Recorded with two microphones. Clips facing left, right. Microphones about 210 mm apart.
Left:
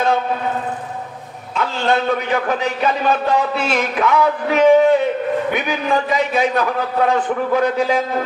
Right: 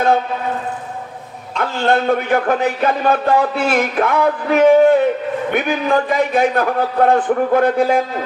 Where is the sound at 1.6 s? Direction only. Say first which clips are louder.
Right 2 dB; 50° right (ahead or behind).